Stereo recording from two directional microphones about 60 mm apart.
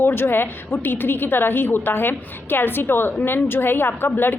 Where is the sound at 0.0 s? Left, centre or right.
Left.